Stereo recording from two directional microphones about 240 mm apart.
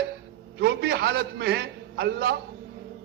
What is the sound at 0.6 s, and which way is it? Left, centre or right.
A man's voice, right.